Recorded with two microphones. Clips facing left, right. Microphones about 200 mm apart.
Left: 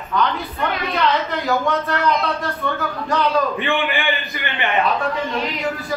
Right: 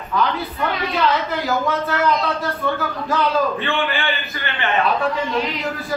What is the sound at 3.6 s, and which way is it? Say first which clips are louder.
A man's voice: left 1 dB; 15° left (ahead or behind).